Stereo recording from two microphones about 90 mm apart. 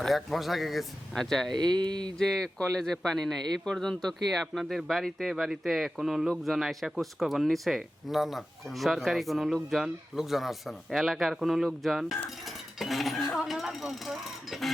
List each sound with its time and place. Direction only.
0.0 s speech: centre (ahead or behind)
1.5 s speech: 50° right (ahead or behind)
2.1 s speech: 5° left (ahead or behind)
12.8 s a sound: centre (ahead or behind)